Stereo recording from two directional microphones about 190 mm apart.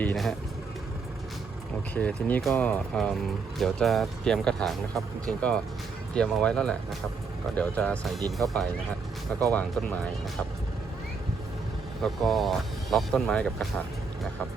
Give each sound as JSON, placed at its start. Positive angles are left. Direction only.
{"t": 0.0, "sound": "speech", "side_deg": 5}
{"t": 2.0, "sound": "speech", "side_deg": 10}
{"t": 9.5, "sound": "speech", "side_deg": 10}
{"t": 12.0, "sound": "speech", "side_deg": 0}